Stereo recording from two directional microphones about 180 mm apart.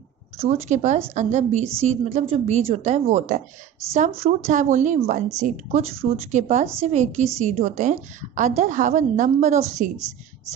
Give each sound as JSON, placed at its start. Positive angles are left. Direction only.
{"t": 0.5, "sound": "a woman's voice", "side_deg": -40}
{"t": 9.9, "sound": "speech", "side_deg": -20}